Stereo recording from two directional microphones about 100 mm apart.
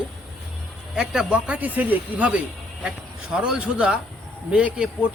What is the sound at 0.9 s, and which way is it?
Speech, 5° right (ahead or behind).